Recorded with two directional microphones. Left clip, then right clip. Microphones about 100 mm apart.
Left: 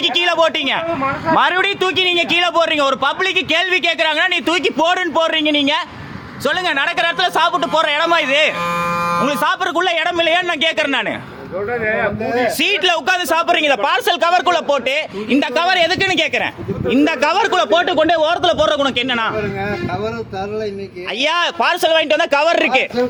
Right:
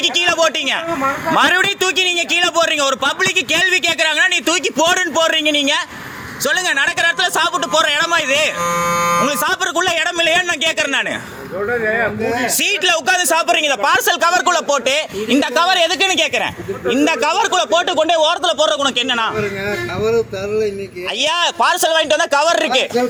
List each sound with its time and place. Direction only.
0.0 s a man's voice: 35° left (ahead or behind)
1.3 s a man's voice: 15° left (ahead or behind)
9.2 s a man's voice: 20° left (ahead or behind)
11.7 s speech: 5° right (ahead or behind)
12.5 s a man's voice: 20° left (ahead or behind)
16.9 s a man's voice: 45° left (ahead or behind)
17.7 s a man's voice: 15° left (ahead or behind)
18.3 s a man's voice: 40° left (ahead or behind)
18.8 s a man's voice: 55° left (ahead or behind)
21.2 s speech: 55° left (ahead or behind)